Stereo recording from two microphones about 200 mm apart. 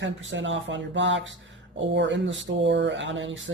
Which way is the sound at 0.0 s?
70° right (ahead or behind).